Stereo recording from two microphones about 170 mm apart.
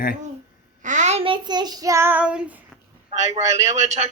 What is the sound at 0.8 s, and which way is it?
Child singing, 45° right (ahead or behind).